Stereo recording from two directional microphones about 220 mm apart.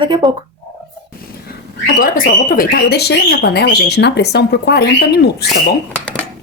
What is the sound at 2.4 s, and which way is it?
Speech, 40° left (ahead or behind).